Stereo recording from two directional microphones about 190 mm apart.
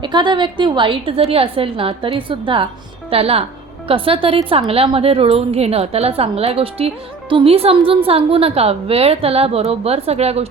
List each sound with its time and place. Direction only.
0.0 s a woman's voice: 25° right (ahead or behind)